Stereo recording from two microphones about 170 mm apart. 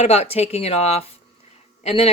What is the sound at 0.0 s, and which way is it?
Speech, 40° left (ahead or behind).